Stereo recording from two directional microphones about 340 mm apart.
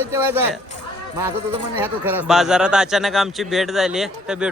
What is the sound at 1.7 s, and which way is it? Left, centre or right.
A man's voice, centre.